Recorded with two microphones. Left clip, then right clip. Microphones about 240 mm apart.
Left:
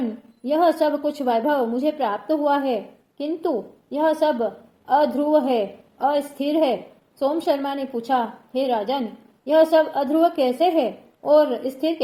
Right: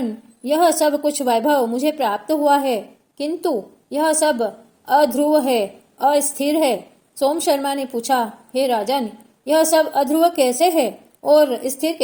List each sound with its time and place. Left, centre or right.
0.4 s a woman's voice: right